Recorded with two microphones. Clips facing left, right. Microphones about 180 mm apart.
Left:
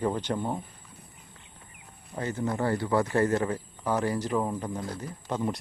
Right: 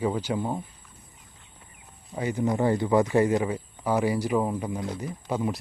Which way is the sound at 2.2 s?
15° right (ahead or behind).